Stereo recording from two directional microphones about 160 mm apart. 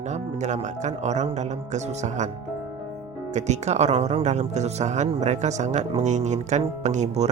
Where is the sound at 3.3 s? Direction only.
45° right (ahead or behind).